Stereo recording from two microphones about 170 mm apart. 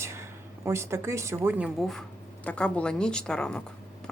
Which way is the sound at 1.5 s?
10° right (ahead or behind).